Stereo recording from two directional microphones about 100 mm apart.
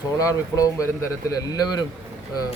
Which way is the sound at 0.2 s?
35° left (ahead or behind).